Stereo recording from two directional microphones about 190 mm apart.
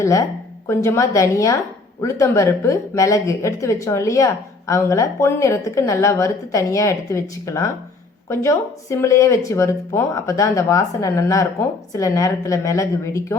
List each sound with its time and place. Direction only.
0.0 s a woman's voice: 15° left (ahead or behind)